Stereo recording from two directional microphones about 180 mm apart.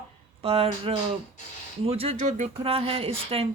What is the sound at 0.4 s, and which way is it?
Speech, 35° right (ahead or behind).